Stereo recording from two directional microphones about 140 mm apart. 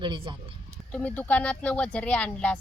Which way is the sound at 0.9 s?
10° left (ahead or behind).